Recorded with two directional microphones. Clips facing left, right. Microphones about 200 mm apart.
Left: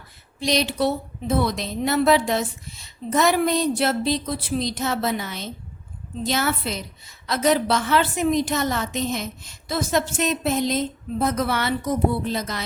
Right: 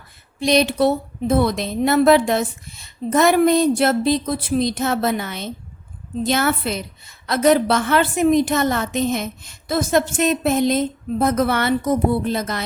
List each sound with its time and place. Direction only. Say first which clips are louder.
0.3 s a woman's voice: right 6 dB; 55° right (ahead or behind)